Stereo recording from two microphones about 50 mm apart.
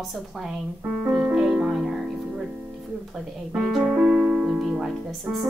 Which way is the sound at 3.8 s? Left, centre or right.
Centre.